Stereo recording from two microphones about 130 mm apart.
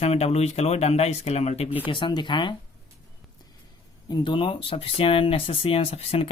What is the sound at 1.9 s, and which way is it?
Speech, 40° left (ahead or behind).